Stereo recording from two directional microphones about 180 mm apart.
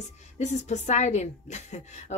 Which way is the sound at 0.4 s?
40° left (ahead or behind).